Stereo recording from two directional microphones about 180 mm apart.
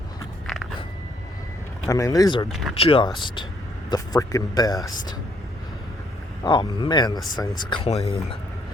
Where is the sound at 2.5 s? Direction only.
Centre (ahead or behind).